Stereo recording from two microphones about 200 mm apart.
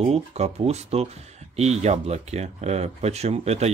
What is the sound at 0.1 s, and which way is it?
Speech, 30° right (ahead or behind).